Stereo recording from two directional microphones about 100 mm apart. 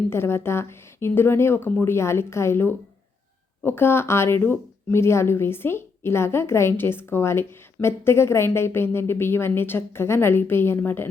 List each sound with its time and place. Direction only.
0.1 s speech: 25° left (ahead or behind)